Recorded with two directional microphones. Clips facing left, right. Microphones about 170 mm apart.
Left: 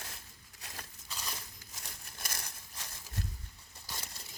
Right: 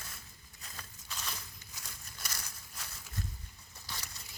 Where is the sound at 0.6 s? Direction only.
70° left (ahead or behind).